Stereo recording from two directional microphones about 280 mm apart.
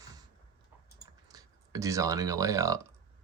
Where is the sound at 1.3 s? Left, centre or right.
Centre.